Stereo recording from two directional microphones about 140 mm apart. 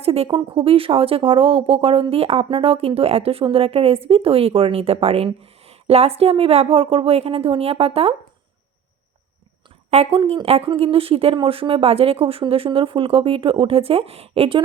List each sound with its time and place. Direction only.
0.0 s a sound: 45° right (ahead or behind)
0.3 s speech: 40° right (ahead or behind)
9.9 s speech: 50° right (ahead or behind)